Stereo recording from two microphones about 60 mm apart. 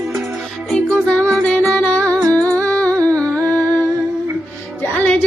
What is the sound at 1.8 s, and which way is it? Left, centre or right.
Music, left.